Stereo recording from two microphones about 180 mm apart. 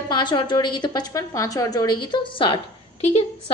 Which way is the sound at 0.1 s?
25° left (ahead or behind).